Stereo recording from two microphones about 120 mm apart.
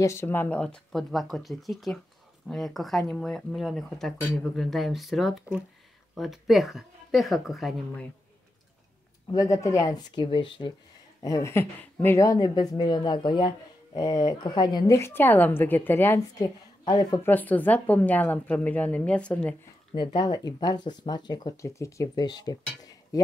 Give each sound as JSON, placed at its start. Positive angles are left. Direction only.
{"t": 0.0, "sound": "a woman's voice", "side_deg": 20}
{"t": 9.3, "sound": "speech", "side_deg": 30}
{"t": 11.2, "sound": "speech", "side_deg": 25}
{"t": 15.0, "sound": "a woman's voice", "side_deg": 20}
{"t": 16.3, "sound": "a woman's voice", "side_deg": 35}
{"t": 17.2, "sound": "a woman's voice", "side_deg": 15}
{"t": 19.9, "sound": "speech", "side_deg": 40}
{"t": 23.1, "sound": "a sound", "side_deg": 30}